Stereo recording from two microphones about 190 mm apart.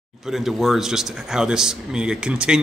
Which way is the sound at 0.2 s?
Centre (ahead or behind).